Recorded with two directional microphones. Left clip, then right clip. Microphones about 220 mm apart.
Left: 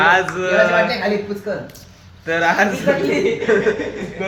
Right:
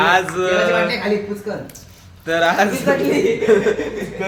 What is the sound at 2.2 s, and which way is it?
Speech, 20° right (ahead or behind).